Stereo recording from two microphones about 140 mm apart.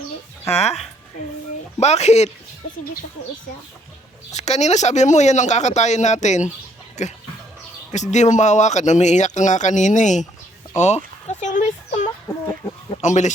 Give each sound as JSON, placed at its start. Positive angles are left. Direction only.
{"t": 0.5, "sound": "speech", "side_deg": 50}
{"t": 1.8, "sound": "speech", "side_deg": 50}
{"t": 4.3, "sound": "speech", "side_deg": 55}
{"t": 10.8, "sound": "a sound", "side_deg": 50}
{"t": 13.0, "sound": "speech", "side_deg": 60}